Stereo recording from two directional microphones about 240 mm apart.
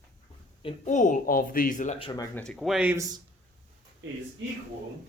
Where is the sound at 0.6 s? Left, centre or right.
Left.